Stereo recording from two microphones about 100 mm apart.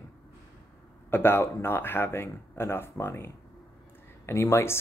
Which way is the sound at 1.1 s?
20° left (ahead or behind).